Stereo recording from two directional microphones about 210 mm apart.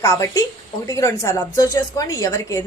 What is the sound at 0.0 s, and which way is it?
A woman's voice, 15° left (ahead or behind).